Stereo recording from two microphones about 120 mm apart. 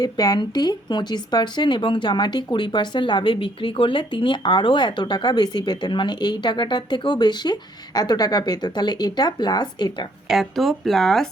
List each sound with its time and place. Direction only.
0.0 s speech: 35° left (ahead or behind)
10.2 s speech: centre (ahead or behind)